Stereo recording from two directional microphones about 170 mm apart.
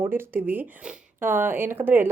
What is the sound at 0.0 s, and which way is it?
Speech, 10° right (ahead or behind).